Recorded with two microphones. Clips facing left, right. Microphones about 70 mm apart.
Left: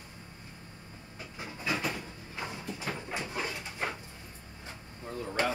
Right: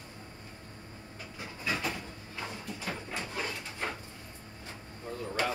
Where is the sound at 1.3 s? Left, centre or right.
Centre.